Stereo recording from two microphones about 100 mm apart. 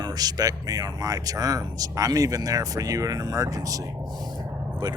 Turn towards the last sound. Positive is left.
turn(degrees=-45)  # may be behind; listen again after turning